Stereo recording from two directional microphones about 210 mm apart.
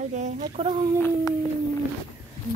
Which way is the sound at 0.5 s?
25° right (ahead or behind).